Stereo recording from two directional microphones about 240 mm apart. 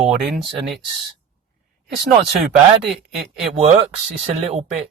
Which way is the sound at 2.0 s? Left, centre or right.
Centre.